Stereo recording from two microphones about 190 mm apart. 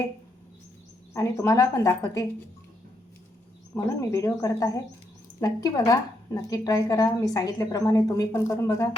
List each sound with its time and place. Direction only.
1.1 s a woman's voice: 15° left (ahead or behind)
3.7 s a woman's voice: 15° left (ahead or behind)